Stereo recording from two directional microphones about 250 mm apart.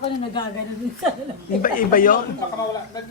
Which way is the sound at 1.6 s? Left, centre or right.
Left.